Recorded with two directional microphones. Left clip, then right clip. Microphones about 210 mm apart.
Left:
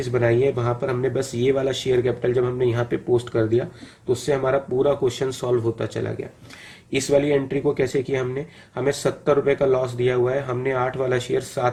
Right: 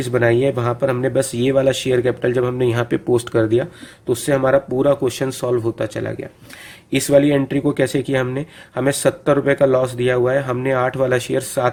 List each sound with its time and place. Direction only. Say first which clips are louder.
0.0 s speech: right 4 dB; 40° right (ahead or behind)